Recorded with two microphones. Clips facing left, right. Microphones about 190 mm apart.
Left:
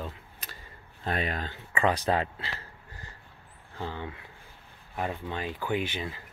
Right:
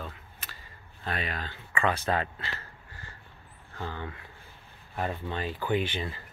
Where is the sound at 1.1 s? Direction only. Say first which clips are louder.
Left 3 dB; 45° left (ahead or behind).